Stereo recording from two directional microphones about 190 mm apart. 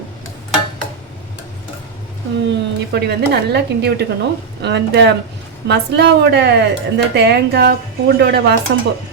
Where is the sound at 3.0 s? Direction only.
60° right (ahead or behind).